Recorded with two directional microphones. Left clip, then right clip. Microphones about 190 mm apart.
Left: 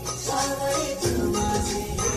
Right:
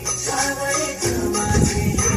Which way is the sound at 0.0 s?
20° right (ahead or behind).